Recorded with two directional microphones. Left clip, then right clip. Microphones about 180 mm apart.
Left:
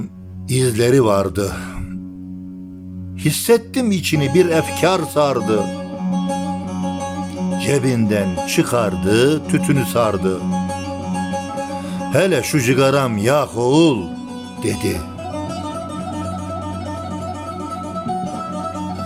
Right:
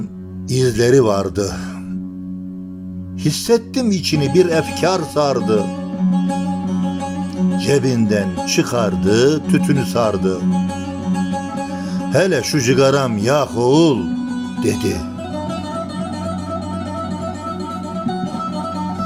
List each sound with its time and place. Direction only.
0.5 s speech: 15° left (ahead or behind)
3.2 s speech: 15° left (ahead or behind)
7.6 s speech: 15° left (ahead or behind)
12.1 s speech: 15° left (ahead or behind)